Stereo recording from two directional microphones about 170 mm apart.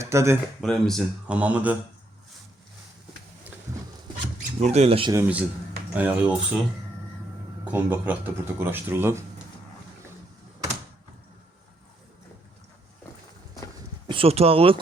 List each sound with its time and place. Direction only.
0.0 s speech: 15° right (ahead or behind)
0.6 s speech: centre (ahead or behind)
1.4 s speech: 10° right (ahead or behind)
4.6 s speech: 40° right (ahead or behind)
5.1 s speech: 10° right (ahead or behind)
7.6 s speech: 10° right (ahead or behind)
13.7 s a sound: 30° right (ahead or behind)